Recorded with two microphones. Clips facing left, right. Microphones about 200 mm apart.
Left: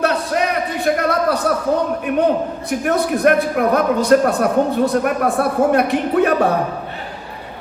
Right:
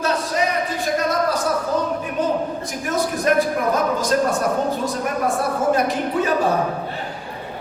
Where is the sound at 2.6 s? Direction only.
60° left (ahead or behind).